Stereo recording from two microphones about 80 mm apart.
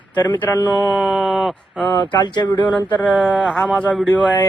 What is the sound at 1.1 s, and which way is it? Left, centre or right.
Speech, centre.